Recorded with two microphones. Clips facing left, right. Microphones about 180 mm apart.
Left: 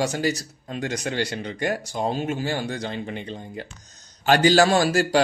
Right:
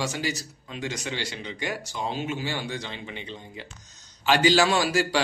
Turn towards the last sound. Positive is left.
turn(degrees=45)  # may be behind; listen again after turning